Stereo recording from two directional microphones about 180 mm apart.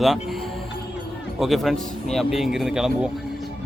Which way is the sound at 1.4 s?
Centre (ahead or behind).